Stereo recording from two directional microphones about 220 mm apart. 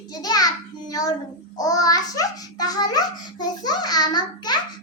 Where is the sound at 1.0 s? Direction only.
15° left (ahead or behind).